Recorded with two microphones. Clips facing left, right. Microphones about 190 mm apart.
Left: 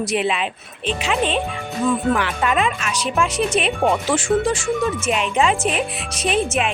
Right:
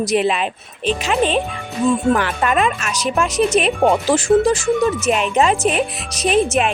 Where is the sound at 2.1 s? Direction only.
45° right (ahead or behind).